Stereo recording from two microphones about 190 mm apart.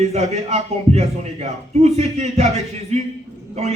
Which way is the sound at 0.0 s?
35° right (ahead or behind).